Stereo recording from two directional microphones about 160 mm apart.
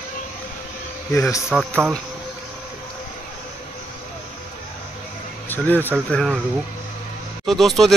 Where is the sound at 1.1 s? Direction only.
20° left (ahead or behind).